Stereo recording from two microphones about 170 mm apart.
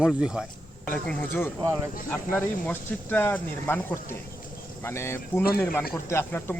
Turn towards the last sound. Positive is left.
turn(degrees=15)  # may be behind; listen again after turning